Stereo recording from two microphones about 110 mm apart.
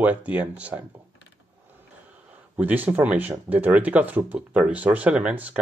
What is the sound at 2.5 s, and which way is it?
Speech, 15° right (ahead or behind).